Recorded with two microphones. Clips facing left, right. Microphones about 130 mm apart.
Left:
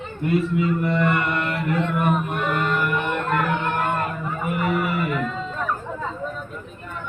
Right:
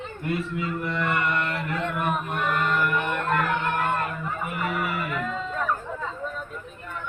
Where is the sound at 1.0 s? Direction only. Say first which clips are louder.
Left 3 dB; 10° left (ahead or behind).